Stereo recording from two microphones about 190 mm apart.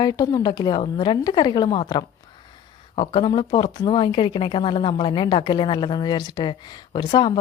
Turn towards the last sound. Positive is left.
turn(degrees=25)  # may be behind; listen again after turning